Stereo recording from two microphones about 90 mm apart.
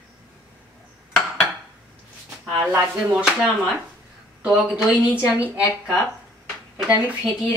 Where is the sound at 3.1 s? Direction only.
15° right (ahead or behind).